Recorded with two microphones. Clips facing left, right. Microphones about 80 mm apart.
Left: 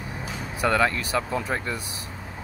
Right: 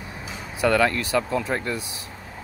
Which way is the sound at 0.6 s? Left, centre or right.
Centre.